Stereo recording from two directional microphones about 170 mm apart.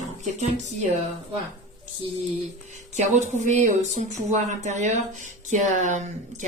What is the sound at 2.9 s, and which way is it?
Speech, 45° right (ahead or behind).